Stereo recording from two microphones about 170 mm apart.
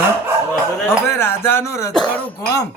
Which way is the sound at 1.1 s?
15° left (ahead or behind).